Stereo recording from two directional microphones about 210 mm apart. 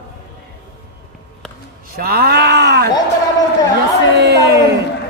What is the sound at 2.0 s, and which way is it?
Speech, 50° right (ahead or behind).